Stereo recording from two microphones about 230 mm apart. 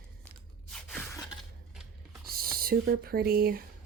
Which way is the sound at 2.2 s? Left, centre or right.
Right.